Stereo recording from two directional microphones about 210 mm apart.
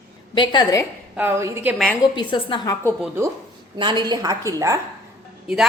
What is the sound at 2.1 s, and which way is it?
Speech, 20° left (ahead or behind).